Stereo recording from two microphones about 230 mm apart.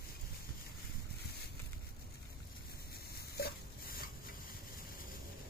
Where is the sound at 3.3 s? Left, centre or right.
Left.